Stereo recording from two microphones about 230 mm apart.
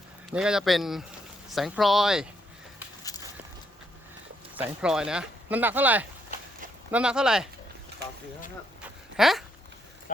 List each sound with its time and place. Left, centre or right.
0.3 s speech: centre
3.1 s walk: centre
4.5 s speech: centre
9.1 s speech: centre